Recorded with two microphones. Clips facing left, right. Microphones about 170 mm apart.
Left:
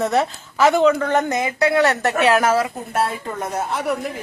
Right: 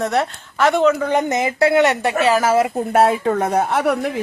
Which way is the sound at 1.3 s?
25° right (ahead or behind).